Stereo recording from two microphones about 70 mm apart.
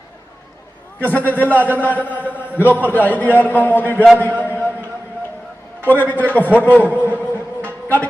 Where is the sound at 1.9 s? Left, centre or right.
Left.